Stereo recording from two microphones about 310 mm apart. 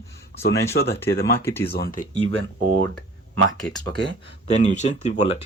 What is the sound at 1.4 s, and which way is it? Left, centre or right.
Speech, centre.